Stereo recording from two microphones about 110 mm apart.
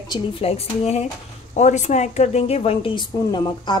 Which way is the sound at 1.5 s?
90° left.